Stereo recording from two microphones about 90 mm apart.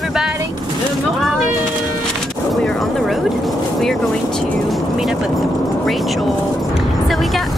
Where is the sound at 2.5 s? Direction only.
5° left (ahead or behind).